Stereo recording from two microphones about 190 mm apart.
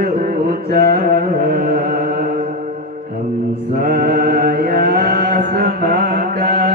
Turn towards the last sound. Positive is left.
turn(degrees=-50)  # may be behind; listen again after turning